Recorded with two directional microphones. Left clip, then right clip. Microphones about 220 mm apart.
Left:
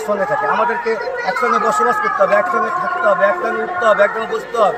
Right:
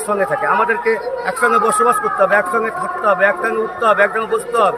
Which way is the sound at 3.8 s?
30° right (ahead or behind).